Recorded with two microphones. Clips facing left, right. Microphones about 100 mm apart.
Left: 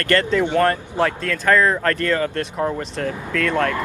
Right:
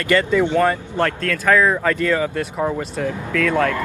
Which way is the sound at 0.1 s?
5° right (ahead or behind).